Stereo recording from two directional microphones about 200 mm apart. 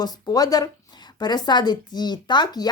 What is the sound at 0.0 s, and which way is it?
A woman's voice, 20° left (ahead or behind).